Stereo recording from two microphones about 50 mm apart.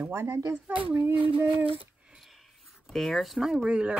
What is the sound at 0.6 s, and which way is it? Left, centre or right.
Speech, right.